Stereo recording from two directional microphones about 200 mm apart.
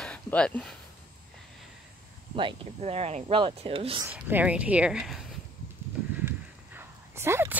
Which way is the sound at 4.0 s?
10° right (ahead or behind).